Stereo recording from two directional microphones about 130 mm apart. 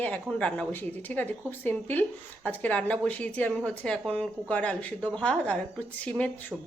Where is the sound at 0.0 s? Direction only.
10° left (ahead or behind).